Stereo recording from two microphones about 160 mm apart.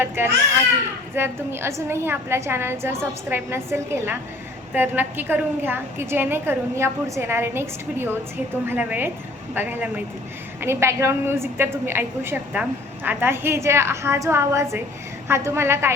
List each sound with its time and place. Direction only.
0.2 s a woman's voice: 15° right (ahead or behind)